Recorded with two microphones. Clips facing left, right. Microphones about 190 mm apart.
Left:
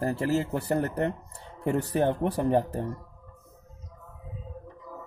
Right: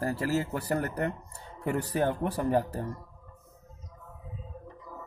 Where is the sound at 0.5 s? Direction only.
30° left (ahead or behind).